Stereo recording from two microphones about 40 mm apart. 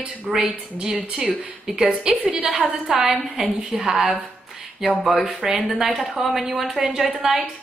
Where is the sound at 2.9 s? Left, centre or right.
Centre.